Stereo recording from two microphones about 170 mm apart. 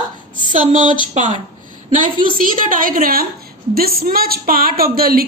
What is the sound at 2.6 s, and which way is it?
A woman's voice, 55° right (ahead or behind).